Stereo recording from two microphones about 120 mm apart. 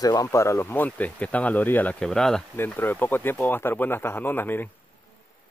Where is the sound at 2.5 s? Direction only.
15° left (ahead or behind).